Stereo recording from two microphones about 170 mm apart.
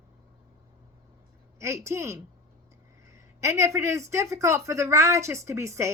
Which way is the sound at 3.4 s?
15° right (ahead or behind).